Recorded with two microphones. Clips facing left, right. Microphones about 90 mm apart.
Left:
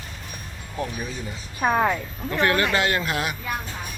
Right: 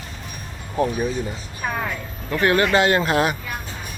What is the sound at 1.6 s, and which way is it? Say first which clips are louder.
Speech: left 5 dB; 25° left (ahead or behind).